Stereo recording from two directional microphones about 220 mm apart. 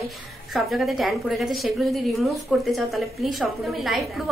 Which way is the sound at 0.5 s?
Centre (ahead or behind).